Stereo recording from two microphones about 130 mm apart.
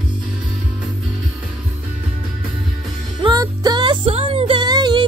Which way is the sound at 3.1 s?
30° right (ahead or behind).